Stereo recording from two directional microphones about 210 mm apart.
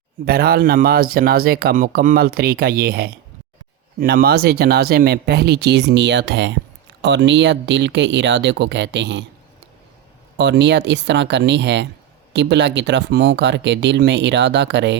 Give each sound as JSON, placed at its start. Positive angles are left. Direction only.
{"t": 0.3, "sound": "speech", "side_deg": -45}
{"t": 10.3, "sound": "speech", "side_deg": -55}